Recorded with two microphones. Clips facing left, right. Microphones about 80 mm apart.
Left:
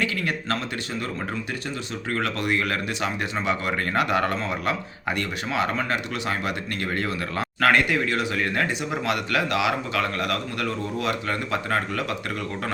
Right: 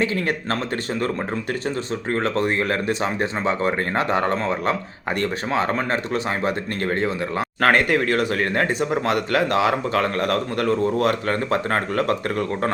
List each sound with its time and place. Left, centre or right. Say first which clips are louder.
0.0 s speech: right 4 dB; right
2.1 s speech: right 3 dB; right
7.6 s speech: right 2 dB; right